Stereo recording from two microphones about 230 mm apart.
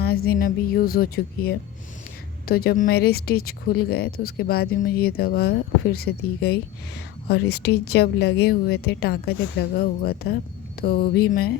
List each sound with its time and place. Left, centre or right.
0.3 s speech: left